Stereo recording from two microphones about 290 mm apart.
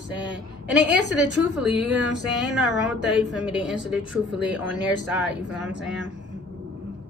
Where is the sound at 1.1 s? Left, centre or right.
Centre.